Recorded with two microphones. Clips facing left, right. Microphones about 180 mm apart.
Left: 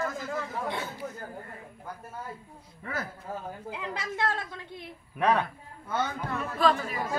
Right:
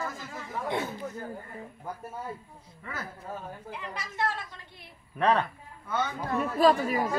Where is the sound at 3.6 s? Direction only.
90° left.